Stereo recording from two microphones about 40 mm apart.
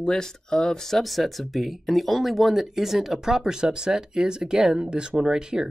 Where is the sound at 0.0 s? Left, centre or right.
Centre.